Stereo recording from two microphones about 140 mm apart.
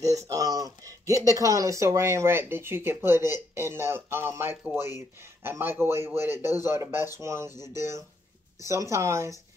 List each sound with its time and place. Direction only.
0.0 s speech: 25° right (ahead or behind)